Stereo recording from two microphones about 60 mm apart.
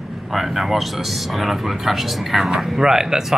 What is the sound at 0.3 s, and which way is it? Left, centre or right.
Speech, centre.